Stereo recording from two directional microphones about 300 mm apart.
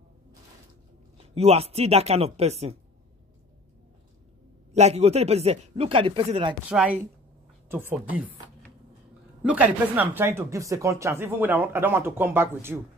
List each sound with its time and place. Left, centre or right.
1.1 s speech: right
4.7 s speech: right
6.7 s speech: centre
9.4 s speech: centre